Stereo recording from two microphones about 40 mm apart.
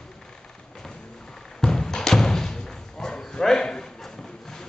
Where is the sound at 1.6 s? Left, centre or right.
Centre.